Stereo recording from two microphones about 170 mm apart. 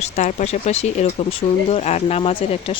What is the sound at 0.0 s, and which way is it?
Speech, 40° left (ahead or behind).